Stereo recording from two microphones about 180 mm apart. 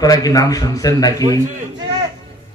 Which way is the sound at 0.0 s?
20° left (ahead or behind).